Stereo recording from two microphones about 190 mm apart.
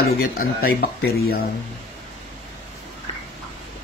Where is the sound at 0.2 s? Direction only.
50° left (ahead or behind).